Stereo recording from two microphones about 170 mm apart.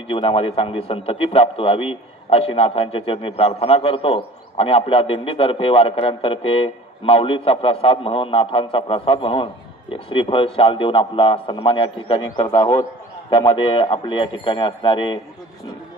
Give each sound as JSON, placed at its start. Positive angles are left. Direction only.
{"t": 0.1, "sound": "a man's voice", "side_deg": 30}